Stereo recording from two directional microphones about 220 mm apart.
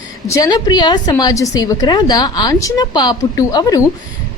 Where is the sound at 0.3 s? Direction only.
15° left (ahead or behind).